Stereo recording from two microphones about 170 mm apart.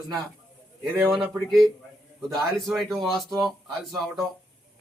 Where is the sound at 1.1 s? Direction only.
Centre (ahead or behind).